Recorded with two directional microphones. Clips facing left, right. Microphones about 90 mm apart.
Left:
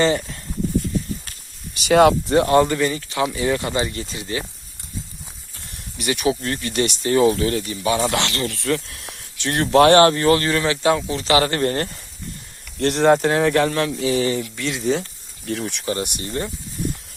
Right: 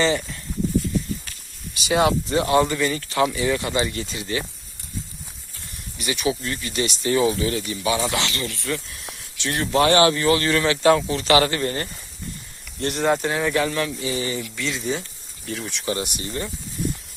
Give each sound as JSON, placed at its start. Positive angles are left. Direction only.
{"t": 1.8, "sound": "speech", "side_deg": 55}
{"t": 2.9, "sound": "speech", "side_deg": 15}
{"t": 3.3, "sound": "speech", "side_deg": 35}
{"t": 6.2, "sound": "speech", "side_deg": 50}
{"t": 7.0, "sound": "speech", "side_deg": 35}
{"t": 10.5, "sound": "speech", "side_deg": 25}
{"t": 11.5, "sound": "speech", "side_deg": 60}
{"t": 12.8, "sound": "speech", "side_deg": 80}
{"t": 14.4, "sound": "speech", "side_deg": 40}